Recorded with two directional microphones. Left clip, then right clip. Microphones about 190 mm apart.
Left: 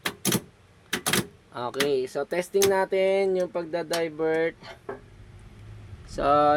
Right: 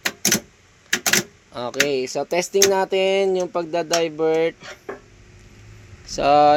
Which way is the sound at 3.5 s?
15° right (ahead or behind).